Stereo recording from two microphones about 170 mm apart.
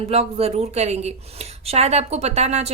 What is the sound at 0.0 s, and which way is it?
A woman's voice, 35° right (ahead or behind).